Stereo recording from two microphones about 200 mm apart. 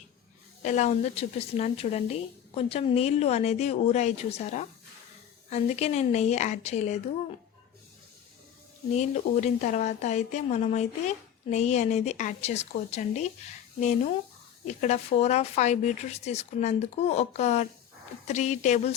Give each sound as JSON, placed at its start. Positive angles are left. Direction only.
{"t": 0.6, "sound": "speech", "side_deg": 35}
{"t": 9.0, "sound": "speech", "side_deg": 35}
{"t": 14.7, "sound": "speech", "side_deg": 35}